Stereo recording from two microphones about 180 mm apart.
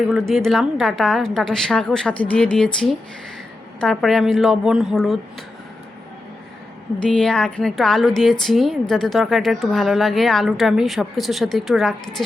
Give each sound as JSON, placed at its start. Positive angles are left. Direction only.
{"t": 0.1, "sound": "a woman's voice", "side_deg": 0}
{"t": 3.8, "sound": "a woman's voice", "side_deg": 0}
{"t": 7.1, "sound": "a woman's voice", "side_deg": 5}